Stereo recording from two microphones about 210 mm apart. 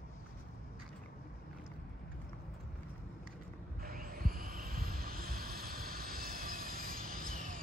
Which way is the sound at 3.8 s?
45° right (ahead or behind).